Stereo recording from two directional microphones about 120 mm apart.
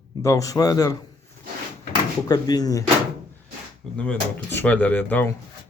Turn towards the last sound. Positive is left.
turn(degrees=15)  # may be behind; listen again after turning